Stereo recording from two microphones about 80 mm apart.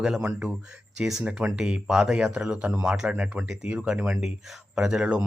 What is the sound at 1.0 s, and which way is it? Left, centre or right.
Speech, centre.